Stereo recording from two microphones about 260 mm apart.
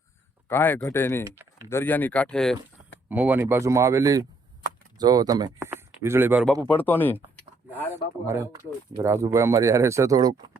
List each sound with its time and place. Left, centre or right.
0.4 s speech: centre
1.2 s speech: centre
1.7 s speech: centre
9.0 s speech: centre